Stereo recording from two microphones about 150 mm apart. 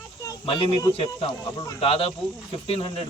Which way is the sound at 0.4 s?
35° left (ahead or behind).